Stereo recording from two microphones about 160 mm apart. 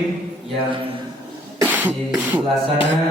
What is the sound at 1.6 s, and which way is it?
Beatboxing, 10° right (ahead or behind).